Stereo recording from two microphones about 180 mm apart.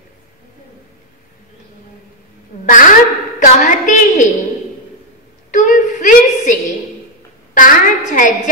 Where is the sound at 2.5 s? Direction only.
45° left (ahead or behind).